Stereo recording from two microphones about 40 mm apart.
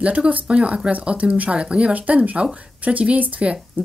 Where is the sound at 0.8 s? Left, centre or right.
Right.